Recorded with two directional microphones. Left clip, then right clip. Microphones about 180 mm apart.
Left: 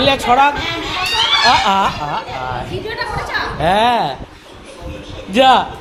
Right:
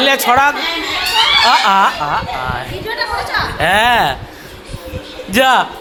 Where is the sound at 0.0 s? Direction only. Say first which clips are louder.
Right 1 dB; 10° left (ahead or behind).